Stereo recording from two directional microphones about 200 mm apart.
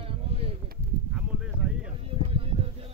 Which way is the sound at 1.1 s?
5° right (ahead or behind).